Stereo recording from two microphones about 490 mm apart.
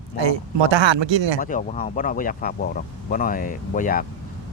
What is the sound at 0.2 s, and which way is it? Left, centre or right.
Speech, right.